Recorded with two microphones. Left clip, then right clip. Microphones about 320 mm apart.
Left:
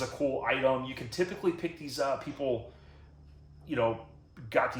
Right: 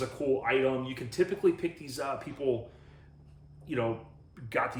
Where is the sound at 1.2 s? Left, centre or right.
Centre.